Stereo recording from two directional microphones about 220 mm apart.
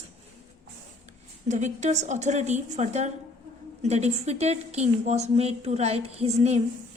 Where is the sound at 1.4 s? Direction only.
35° right (ahead or behind).